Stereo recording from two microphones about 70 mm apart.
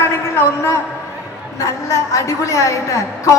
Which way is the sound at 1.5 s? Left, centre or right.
Left.